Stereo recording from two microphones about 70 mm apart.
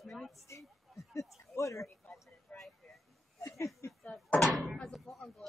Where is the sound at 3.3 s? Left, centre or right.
Left.